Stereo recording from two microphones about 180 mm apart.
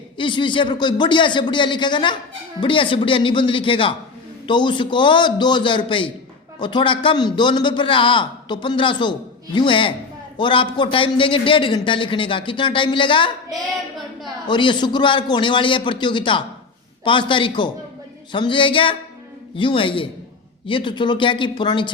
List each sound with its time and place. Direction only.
0.2 s a man's voice: 25° left (ahead or behind)
13.5 s a woman's voice: centre (ahead or behind)
14.4 s a man's voice: 25° left (ahead or behind)